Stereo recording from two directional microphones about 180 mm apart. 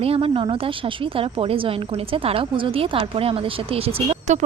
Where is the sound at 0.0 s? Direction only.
30° right (ahead or behind).